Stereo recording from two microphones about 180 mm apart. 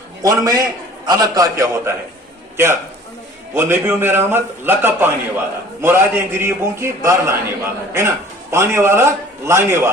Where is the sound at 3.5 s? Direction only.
15° right (ahead or behind).